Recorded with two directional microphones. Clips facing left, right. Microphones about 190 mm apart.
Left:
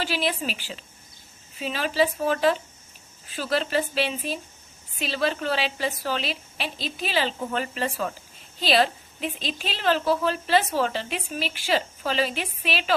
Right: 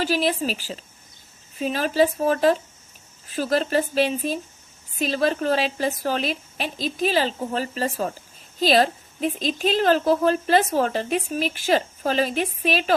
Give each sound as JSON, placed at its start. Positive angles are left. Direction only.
{"t": 0.0, "sound": "a woman's voice", "side_deg": -40}